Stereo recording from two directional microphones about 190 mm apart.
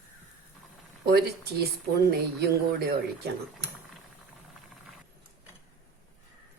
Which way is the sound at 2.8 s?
55° right (ahead or behind).